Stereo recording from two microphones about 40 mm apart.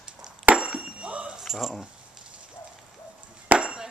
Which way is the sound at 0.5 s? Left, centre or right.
Right.